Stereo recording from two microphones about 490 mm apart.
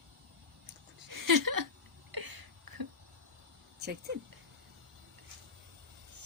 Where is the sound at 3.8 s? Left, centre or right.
Centre.